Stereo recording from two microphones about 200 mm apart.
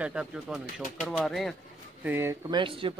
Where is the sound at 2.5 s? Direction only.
25° right (ahead or behind).